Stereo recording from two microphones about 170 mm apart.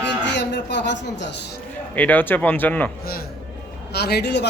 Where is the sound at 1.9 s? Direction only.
10° left (ahead or behind).